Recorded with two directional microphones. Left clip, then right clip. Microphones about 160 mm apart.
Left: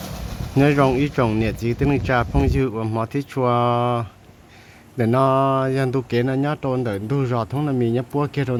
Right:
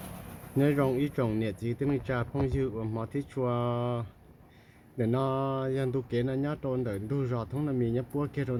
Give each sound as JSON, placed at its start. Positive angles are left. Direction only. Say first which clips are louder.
{"t": 0.0, "sound": "speech", "louder": "left 12 dB", "side_deg": 35}